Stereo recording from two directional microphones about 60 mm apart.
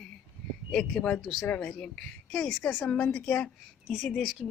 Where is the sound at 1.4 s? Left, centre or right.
Left.